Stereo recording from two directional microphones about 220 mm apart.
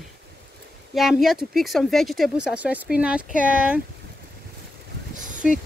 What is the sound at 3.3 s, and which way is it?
Speech, 35° right (ahead or behind).